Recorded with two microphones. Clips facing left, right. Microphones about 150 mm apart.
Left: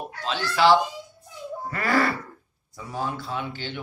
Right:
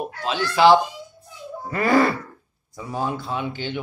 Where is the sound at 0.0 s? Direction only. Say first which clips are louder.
Right 4 dB; 15° right (ahead or behind).